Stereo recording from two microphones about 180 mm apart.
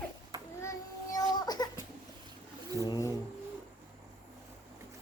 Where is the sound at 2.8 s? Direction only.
20° left (ahead or behind).